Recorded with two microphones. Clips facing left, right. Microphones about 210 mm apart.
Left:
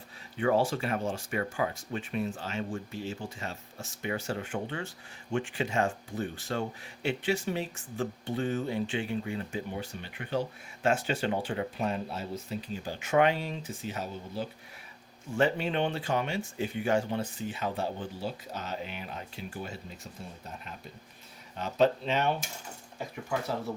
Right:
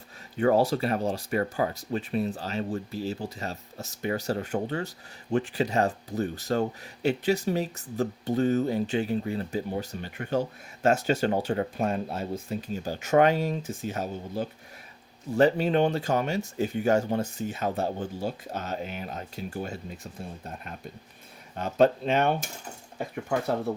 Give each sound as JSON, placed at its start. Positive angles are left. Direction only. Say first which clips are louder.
{"t": 0.3, "sound": "speech", "louder": "right 4 dB", "side_deg": -40}
{"t": 21.5, "sound": "speech", "louder": "right 4 dB", "side_deg": -50}